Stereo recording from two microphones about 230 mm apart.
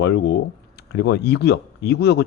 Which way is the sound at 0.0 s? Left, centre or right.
Left.